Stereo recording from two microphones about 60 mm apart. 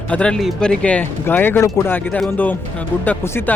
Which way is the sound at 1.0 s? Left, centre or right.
Left.